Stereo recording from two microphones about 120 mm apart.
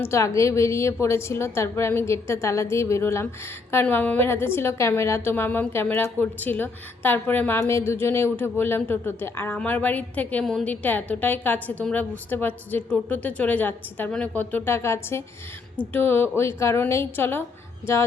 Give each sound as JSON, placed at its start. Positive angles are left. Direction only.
{"t": 0.0, "sound": "a woman's voice", "side_deg": 25}